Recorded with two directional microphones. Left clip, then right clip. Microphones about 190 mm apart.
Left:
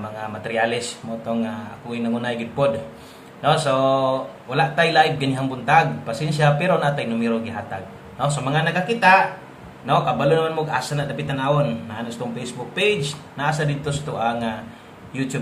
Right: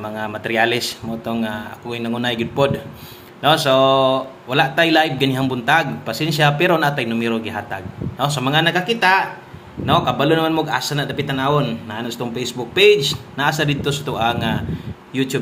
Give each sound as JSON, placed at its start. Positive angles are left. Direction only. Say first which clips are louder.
{"t": 0.2, "sound": "speech", "louder": "right 4 dB", "side_deg": -35}